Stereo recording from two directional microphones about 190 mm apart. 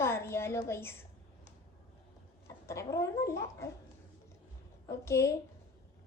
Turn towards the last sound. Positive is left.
turn(degrees=15)  # may be behind; listen again after turning